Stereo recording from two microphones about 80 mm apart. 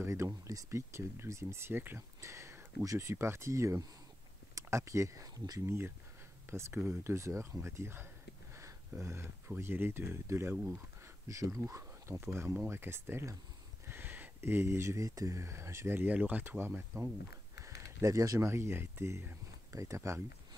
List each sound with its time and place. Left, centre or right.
0.0 s speech: right
2.0 s speech: right
5.7 s speech: right
8.5 s a sound: right
9.5 s speech: right
11.2 s speech: right
17.6 s speech: right